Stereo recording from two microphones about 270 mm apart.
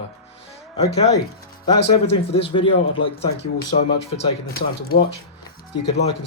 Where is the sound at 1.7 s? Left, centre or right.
Left.